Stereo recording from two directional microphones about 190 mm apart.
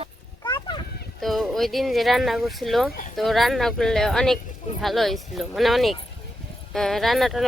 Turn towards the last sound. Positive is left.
turn(degrees=0)  # may be behind; listen again after turning